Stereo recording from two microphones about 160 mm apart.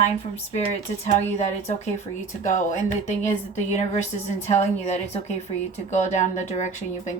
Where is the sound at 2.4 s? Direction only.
50° left (ahead or behind).